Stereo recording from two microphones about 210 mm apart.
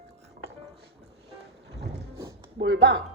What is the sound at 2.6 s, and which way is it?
Speech, 60° right (ahead or behind).